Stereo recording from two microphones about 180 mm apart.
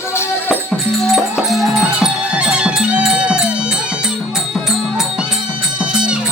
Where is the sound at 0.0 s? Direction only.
15° left (ahead or behind).